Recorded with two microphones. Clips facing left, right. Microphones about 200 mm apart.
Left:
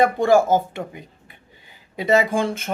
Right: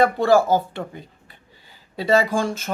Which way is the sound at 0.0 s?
20° left (ahead or behind).